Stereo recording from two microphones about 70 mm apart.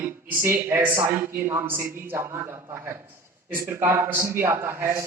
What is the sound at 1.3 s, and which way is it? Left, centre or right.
Speech, right.